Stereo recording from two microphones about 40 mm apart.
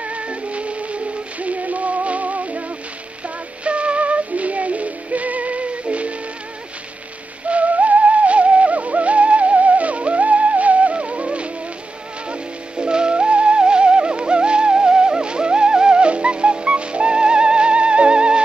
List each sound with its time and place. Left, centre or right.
0.0 s music: right
3.6 s music: right
7.4 s music: right